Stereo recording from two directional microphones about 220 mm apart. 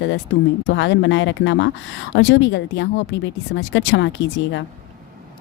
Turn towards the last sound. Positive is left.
turn(degrees=55)  # may be behind; listen again after turning